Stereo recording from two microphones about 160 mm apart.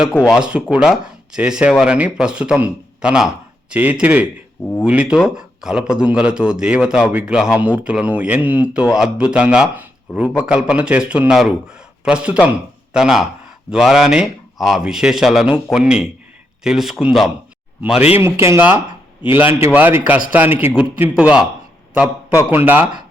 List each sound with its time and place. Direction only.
0.3 s a man's voice: 5° right (ahead or behind)
18.2 s a man's voice: 15° right (ahead or behind)